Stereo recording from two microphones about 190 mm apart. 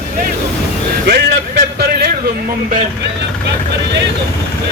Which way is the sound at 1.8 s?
55° right (ahead or behind).